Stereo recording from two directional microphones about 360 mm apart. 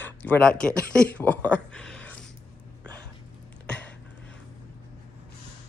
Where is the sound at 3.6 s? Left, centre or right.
Centre.